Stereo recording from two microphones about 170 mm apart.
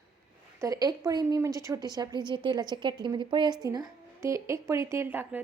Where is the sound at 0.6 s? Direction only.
20° right (ahead or behind).